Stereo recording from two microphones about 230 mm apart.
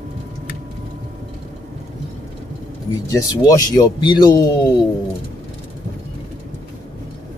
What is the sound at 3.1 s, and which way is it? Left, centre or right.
Speech, centre.